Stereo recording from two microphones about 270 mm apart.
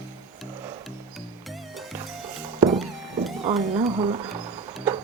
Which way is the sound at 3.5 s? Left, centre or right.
Centre.